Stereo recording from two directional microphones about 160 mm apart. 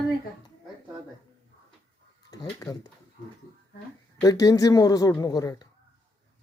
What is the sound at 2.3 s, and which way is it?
Speech, 20° left (ahead or behind).